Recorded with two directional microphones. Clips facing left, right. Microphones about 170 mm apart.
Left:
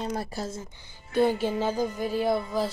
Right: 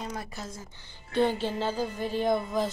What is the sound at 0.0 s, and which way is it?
Speech, 35° left (ahead or behind).